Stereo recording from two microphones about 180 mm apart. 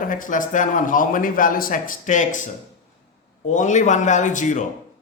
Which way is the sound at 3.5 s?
45° left (ahead or behind).